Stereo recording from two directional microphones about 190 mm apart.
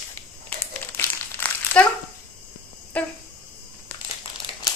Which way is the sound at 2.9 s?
5° left (ahead or behind).